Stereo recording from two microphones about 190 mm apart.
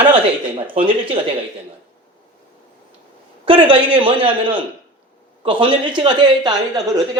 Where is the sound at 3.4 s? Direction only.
25° right (ahead or behind).